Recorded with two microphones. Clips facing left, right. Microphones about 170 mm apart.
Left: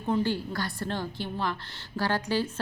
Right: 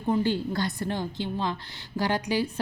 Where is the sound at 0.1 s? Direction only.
15° right (ahead or behind).